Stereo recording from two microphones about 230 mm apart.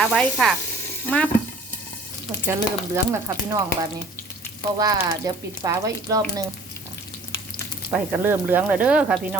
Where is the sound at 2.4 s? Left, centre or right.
Centre.